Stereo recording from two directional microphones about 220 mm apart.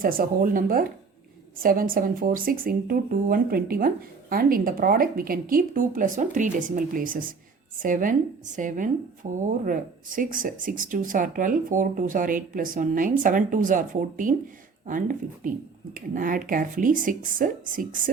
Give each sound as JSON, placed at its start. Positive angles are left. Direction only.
{"t": 0.0, "sound": "speech", "side_deg": -40}